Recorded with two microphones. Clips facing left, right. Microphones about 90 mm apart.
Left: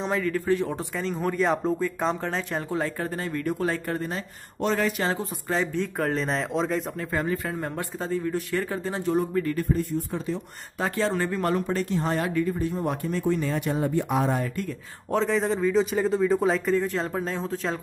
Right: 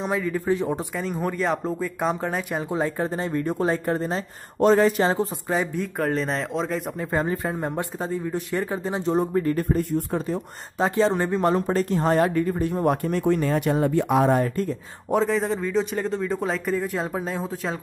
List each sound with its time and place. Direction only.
0.0 s speech: 10° right (ahead or behind)
0.9 s speech: 5° right (ahead or behind)
2.7 s speech: 20° right (ahead or behind)
5.5 s speech: 10° right (ahead or behind)
5.9 s speech: centre (ahead or behind)
7.0 s speech: 25° right (ahead or behind)
9.6 s speech: 50° right (ahead or behind)
10.8 s speech: 20° right (ahead or behind)
11.6 s speech: 35° right (ahead or behind)
11.9 s speech: 50° right (ahead or behind)
12.5 s speech: 60° right (ahead or behind)
15.0 s speech: 5° right (ahead or behind)